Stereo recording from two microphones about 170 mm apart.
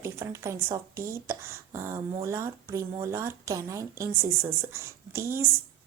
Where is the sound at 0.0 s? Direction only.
15° right (ahead or behind).